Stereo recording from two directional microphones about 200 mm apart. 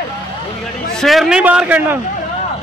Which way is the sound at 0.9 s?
Centre (ahead or behind).